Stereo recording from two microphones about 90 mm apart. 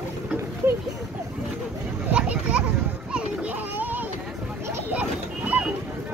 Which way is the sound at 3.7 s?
20° right (ahead or behind).